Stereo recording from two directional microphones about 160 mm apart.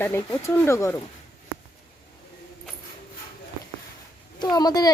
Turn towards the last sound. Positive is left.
turn(degrees=25)  # may be behind; listen again after turning